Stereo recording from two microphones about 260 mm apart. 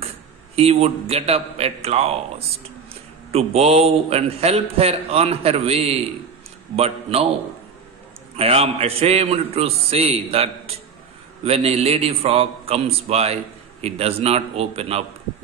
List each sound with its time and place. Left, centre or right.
0.6 s a man's voice: right
8.4 s a man's voice: right